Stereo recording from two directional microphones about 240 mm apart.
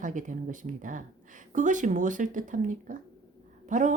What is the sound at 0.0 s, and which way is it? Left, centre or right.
Speech, right.